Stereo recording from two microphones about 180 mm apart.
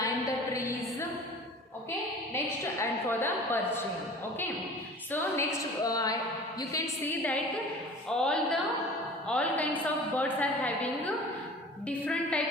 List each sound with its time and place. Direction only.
0.0 s a sound: 15° left (ahead or behind)
2.3 s a woman's voice: 10° left (ahead or behind)
5.1 s a woman's voice: 15° left (ahead or behind)